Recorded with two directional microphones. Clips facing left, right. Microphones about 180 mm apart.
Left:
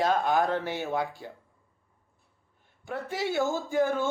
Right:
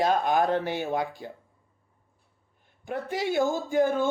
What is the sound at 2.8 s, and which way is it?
Speech, 15° right (ahead or behind).